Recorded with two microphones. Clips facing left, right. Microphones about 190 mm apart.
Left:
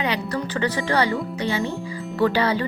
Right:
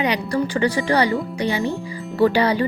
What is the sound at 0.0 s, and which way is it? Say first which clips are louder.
Speech: right 4 dB; 15° right (ahead or behind).